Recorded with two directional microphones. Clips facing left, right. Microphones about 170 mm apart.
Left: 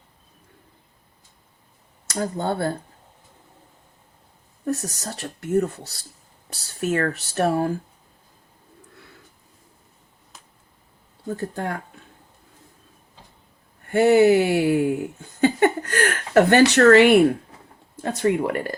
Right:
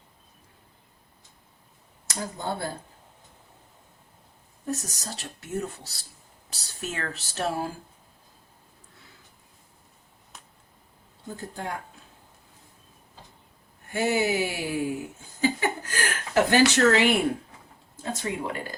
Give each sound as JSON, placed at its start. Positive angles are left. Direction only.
{"t": 2.1, "sound": "speech", "side_deg": 60}
{"t": 4.6, "sound": "speech", "side_deg": 60}
{"t": 11.3, "sound": "speech", "side_deg": 60}
{"t": 13.9, "sound": "speech", "side_deg": 60}